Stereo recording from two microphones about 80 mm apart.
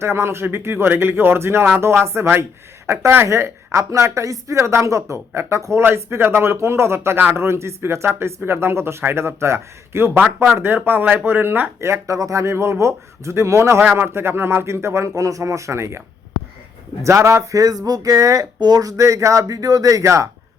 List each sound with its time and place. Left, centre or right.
0.0 s speech: right